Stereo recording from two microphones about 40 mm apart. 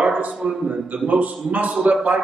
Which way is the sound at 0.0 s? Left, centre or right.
Right.